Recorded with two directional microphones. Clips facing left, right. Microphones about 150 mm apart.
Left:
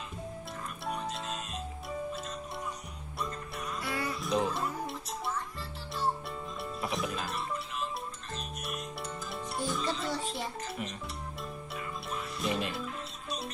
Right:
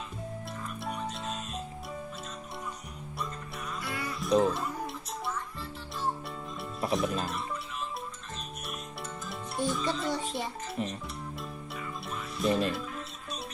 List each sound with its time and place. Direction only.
0.8 s music: centre (ahead or behind)
3.2 s music: centre (ahead or behind)
6.6 s music: centre (ahead or behind)
9.3 s music: centre (ahead or behind)
10.3 s a child's voice: 30° right (ahead or behind)
11.7 s music: centre (ahead or behind)